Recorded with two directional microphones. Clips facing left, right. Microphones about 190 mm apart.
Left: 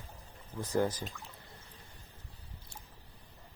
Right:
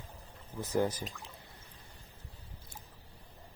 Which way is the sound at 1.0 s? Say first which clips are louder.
Even; centre (ahead or behind).